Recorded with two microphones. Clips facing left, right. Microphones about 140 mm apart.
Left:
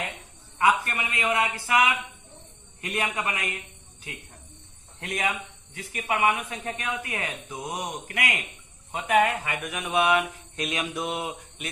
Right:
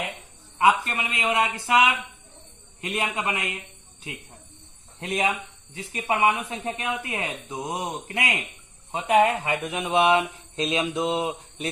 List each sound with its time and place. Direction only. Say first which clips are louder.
0.6 s speech: right 2 dB; 20° right (ahead or behind)